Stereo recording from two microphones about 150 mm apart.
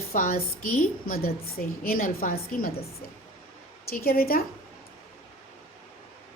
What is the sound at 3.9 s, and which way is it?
Speech, 85° left.